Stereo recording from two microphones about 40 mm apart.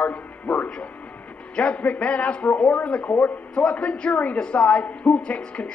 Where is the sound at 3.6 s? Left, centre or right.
Left.